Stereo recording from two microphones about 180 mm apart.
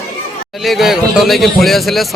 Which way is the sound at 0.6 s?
Centre (ahead or behind).